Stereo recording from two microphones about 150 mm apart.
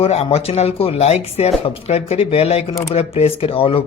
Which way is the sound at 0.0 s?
45° left (ahead or behind).